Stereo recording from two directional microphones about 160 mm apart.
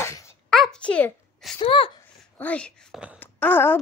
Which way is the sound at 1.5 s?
35° left (ahead or behind).